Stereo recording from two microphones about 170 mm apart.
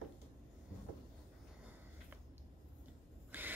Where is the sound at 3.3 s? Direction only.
10° right (ahead or behind).